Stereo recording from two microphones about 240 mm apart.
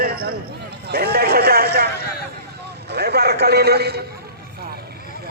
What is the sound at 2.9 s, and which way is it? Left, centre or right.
A man's voice, right.